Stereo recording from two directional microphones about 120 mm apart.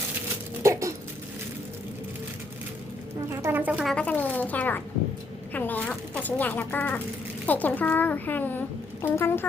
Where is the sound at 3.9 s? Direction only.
10° left (ahead or behind).